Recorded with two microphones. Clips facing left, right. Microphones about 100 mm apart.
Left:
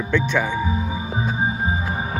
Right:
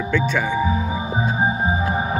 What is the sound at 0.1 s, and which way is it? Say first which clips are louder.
Speech: even; 5° right (ahead or behind).